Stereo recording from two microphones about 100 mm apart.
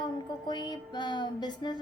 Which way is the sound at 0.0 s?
45° left (ahead or behind).